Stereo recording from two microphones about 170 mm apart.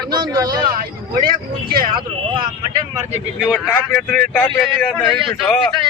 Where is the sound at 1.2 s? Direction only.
60° right (ahead or behind).